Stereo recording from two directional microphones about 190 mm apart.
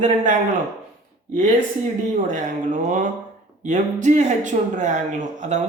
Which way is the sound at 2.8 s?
45° right (ahead or behind).